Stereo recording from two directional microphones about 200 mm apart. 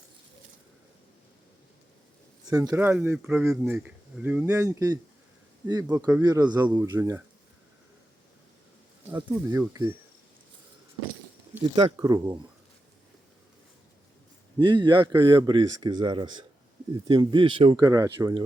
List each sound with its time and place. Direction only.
2.5 s speech: 15° right (ahead or behind)
6.6 s speech: 10° right (ahead or behind)
9.0 s speech: 10° right (ahead or behind)
11.6 s speech: 25° right (ahead or behind)
14.6 s speech: 20° right (ahead or behind)